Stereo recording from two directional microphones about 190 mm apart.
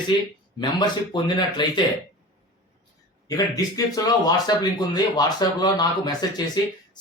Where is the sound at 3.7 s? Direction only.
20° left (ahead or behind).